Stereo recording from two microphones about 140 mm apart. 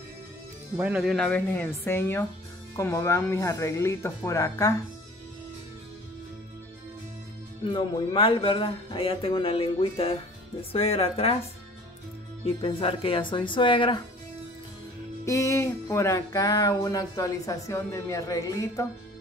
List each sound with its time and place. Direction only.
0.7 s speech: 10° right (ahead or behind)
1.1 s speech: 10° left (ahead or behind)
2.7 s music: 20° left (ahead or behind)
7.6 s speech: 35° left (ahead or behind)
12.4 s speech: 40° left (ahead or behind)
15.2 s music: 20° left (ahead or behind)